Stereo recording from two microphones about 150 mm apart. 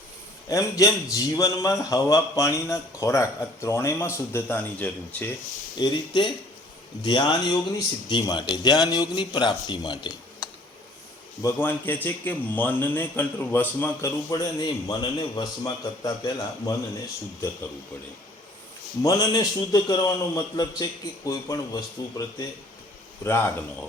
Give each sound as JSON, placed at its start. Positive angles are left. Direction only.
{"t": 0.4, "sound": "a man's voice", "side_deg": 20}
{"t": 5.7, "sound": "a man's voice", "side_deg": 30}
{"t": 11.4, "sound": "a man's voice", "side_deg": 15}
{"t": 14.3, "sound": "a man's voice", "side_deg": 25}
{"t": 19.0, "sound": "a man's voice", "side_deg": 20}
{"t": 23.2, "sound": "a man's voice", "side_deg": 15}